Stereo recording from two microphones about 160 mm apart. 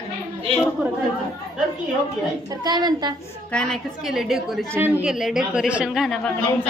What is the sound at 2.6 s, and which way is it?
Speech, 25° right (ahead or behind).